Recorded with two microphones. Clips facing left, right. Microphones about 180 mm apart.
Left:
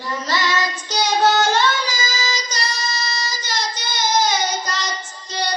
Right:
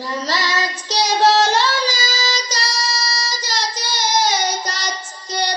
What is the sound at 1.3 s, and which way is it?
Singing, 35° right (ahead or behind).